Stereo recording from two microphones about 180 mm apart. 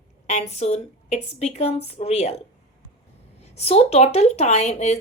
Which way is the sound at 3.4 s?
35° left (ahead or behind).